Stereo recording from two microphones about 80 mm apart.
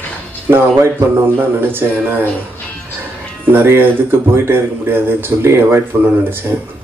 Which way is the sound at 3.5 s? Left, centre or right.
Right.